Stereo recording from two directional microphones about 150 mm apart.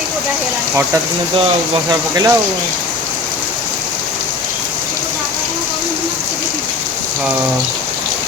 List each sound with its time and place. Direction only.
1.9 s speech: 25° right (ahead or behind)